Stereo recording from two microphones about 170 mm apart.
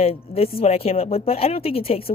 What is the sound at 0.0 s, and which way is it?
Speech, 35° left (ahead or behind).